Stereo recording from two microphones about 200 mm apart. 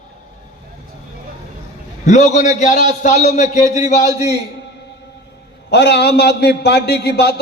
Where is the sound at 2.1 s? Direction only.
35° left (ahead or behind).